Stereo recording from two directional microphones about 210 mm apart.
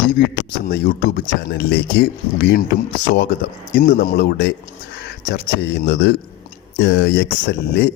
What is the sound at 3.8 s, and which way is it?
Speech, 45° left (ahead or behind).